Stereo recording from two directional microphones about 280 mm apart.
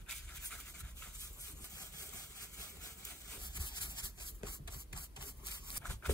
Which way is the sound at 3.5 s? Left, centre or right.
Centre.